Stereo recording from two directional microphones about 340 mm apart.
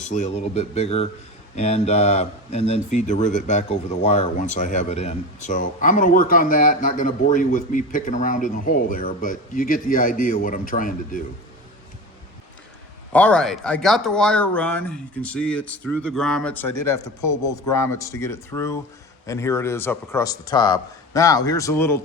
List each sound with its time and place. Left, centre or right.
0.0 s speech: left
13.1 s a man's voice: centre